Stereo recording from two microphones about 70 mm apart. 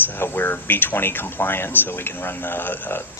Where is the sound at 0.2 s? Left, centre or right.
Left.